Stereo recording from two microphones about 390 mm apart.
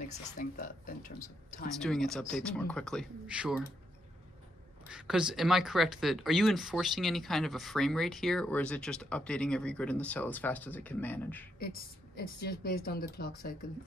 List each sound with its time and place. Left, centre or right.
0.4 s a woman's voice: centre
1.8 s speech: centre
4.8 s speech: centre
11.6 s a woman's voice: left